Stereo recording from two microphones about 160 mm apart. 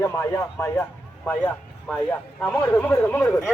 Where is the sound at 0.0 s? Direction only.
15° left (ahead or behind).